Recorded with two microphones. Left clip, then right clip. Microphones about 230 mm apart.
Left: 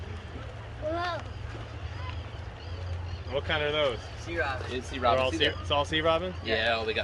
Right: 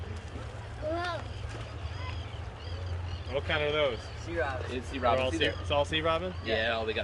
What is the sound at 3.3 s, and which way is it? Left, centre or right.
Speech, centre.